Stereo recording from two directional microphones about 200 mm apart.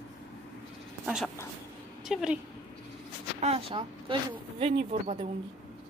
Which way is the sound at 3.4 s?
30° right (ahead or behind).